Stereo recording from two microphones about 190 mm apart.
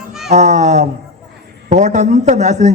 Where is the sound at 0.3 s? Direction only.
40° right (ahead or behind).